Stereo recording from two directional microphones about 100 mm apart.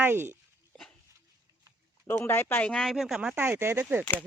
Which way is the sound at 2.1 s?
20° left (ahead or behind).